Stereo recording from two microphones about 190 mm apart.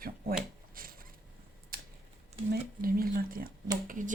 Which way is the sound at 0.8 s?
50° right (ahead or behind).